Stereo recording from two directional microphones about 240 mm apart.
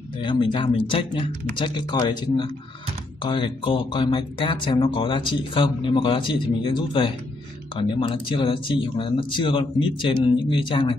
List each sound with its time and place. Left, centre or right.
0.2 s speech: centre